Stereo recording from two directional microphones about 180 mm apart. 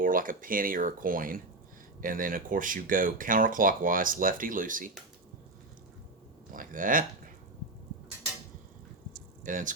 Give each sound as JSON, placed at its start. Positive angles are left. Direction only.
{"t": 0.0, "sound": "speech", "side_deg": -50}
{"t": 6.5, "sound": "a sound", "side_deg": -50}
{"t": 9.4, "sound": "speech", "side_deg": -45}